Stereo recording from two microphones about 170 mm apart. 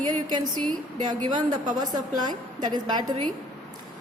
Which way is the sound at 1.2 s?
25° right (ahead or behind).